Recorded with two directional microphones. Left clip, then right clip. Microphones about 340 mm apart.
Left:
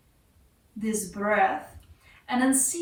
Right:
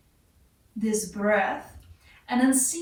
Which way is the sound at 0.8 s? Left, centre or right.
Centre.